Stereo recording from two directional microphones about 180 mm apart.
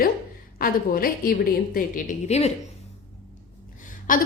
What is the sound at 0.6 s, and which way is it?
A woman's voice, 55° left (ahead or behind).